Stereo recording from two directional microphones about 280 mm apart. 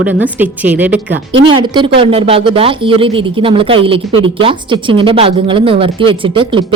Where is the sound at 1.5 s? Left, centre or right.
Centre.